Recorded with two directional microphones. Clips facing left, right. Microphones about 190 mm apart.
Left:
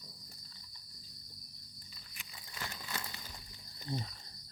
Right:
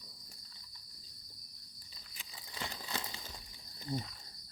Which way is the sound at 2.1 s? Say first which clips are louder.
Right 2 dB; 25° right (ahead or behind).